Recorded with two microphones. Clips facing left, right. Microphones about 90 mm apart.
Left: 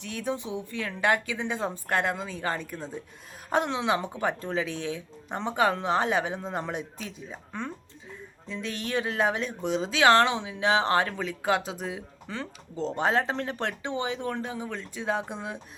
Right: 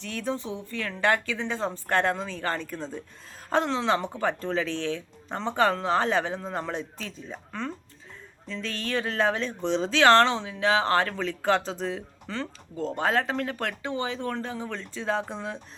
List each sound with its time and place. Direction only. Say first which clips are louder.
0.0 s speech: right 1 dB; 15° left (ahead or behind)